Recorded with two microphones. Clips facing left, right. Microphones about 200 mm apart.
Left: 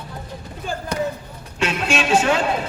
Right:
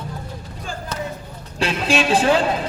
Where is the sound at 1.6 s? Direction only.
35° right (ahead or behind).